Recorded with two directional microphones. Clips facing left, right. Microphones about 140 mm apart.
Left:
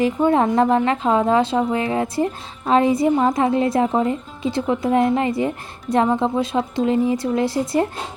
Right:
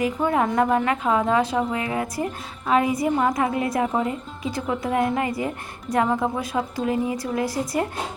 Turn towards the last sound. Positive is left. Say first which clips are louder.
# left 5 dB
turn(degrees=25)  # may be behind; listen again after turning